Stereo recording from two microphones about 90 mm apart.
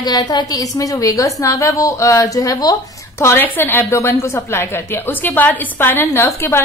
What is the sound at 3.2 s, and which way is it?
A woman's voice, 25° left (ahead or behind).